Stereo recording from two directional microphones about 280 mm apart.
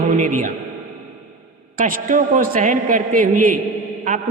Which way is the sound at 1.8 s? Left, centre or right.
Right.